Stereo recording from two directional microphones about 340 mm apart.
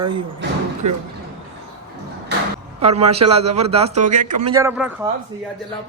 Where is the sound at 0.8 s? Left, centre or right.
Right.